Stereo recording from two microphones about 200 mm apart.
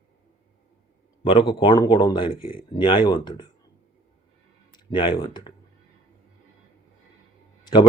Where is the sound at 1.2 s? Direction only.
25° left (ahead or behind).